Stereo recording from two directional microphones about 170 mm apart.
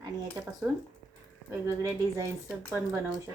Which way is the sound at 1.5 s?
15° right (ahead or behind).